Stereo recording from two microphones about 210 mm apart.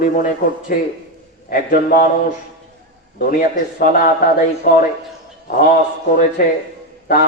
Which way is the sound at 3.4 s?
40° left (ahead or behind).